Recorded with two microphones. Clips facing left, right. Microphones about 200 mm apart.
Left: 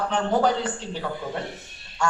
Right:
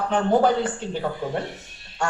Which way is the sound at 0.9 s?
40° right (ahead or behind).